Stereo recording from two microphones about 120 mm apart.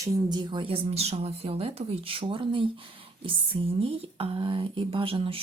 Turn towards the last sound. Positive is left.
turn(degrees=-50)  # may be behind; listen again after turning